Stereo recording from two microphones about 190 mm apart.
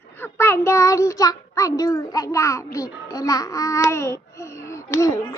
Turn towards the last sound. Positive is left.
turn(degrees=15)  # may be behind; listen again after turning